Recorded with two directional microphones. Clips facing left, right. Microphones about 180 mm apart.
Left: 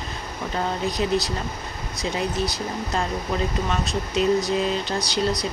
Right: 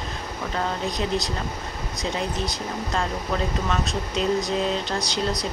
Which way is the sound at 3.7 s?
5° left (ahead or behind).